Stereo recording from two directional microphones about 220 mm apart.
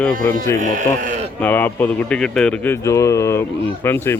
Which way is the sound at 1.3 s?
10° left (ahead or behind).